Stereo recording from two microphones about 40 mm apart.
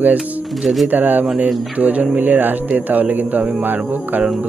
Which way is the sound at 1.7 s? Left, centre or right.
Right.